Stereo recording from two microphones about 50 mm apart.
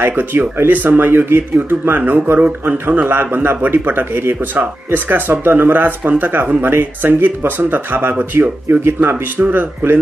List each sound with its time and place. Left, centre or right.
0.1 s speech: right
3.1 s speech: right
9.1 s speech: right